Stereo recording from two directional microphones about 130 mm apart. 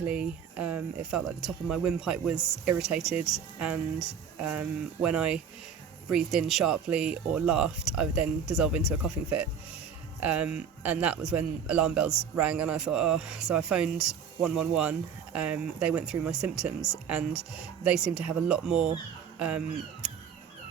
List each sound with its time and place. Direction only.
0.1 s speech: 10° right (ahead or behind)
5.0 s speech: 10° right (ahead or behind)